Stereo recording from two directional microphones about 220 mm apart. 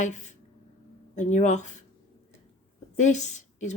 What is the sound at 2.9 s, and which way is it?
Speech, 35° left (ahead or behind).